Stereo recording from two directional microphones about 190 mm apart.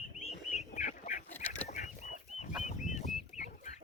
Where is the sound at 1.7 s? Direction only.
40° left (ahead or behind).